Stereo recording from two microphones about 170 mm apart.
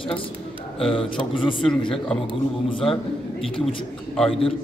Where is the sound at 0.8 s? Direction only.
30° left (ahead or behind).